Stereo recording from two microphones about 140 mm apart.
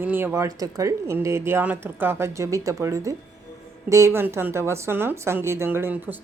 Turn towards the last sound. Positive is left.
turn(degrees=-15)  # may be behind; listen again after turning